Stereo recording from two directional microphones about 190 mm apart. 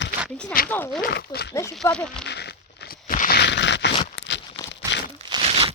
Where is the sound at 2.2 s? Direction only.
65° left (ahead or behind).